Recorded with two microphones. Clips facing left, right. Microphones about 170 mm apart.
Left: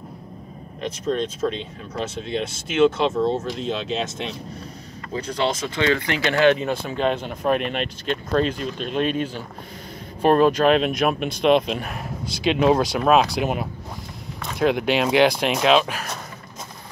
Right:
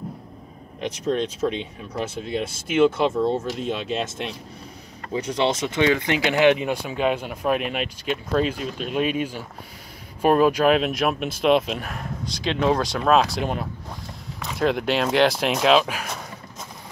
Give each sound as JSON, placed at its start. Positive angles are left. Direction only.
{"t": 0.7, "sound": "speech", "side_deg": -15}
{"t": 5.1, "sound": "speech", "side_deg": -20}
{"t": 12.4, "sound": "speech", "side_deg": 10}